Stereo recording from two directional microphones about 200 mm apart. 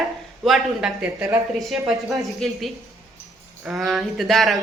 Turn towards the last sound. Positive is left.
turn(degrees=0)  # may be behind; listen again after turning